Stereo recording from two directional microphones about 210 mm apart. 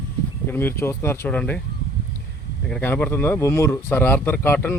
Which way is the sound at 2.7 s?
10° left (ahead or behind).